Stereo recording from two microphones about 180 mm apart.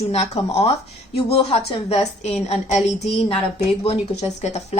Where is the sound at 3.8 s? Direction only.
35° left (ahead or behind).